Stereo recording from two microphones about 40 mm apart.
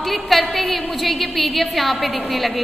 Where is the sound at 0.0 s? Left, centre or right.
Centre.